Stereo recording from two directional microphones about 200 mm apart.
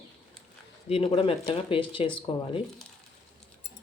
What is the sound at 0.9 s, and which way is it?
Speech, 30° left (ahead or behind).